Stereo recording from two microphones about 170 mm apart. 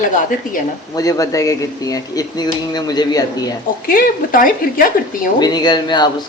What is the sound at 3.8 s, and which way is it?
Speech, 55° left (ahead or behind).